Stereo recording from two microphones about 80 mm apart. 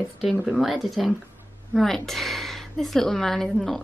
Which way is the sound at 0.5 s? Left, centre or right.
Centre.